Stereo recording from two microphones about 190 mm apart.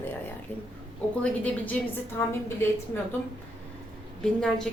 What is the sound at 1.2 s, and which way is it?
A woman's voice, 10° left (ahead or behind).